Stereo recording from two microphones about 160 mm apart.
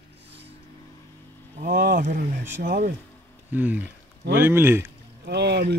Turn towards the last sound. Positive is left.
turn(degrees=-90)